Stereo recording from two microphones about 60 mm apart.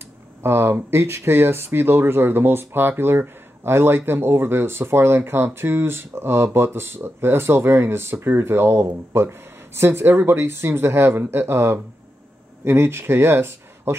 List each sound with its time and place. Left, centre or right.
0.4 s speech: right